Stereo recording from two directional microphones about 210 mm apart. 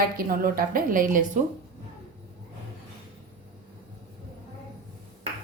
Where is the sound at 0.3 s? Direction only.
45° right (ahead or behind).